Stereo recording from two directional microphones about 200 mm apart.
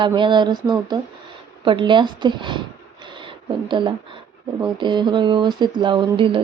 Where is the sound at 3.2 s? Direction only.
25° right (ahead or behind).